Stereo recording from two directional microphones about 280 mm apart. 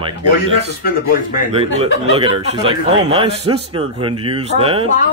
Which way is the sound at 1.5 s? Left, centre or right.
Centre.